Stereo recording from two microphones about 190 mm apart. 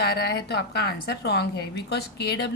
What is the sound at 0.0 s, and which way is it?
A woman's voice, 55° left (ahead or behind).